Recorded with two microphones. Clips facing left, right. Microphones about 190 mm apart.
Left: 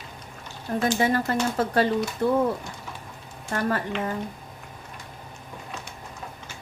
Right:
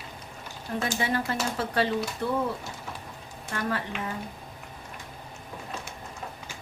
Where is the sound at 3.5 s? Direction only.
40° left (ahead or behind).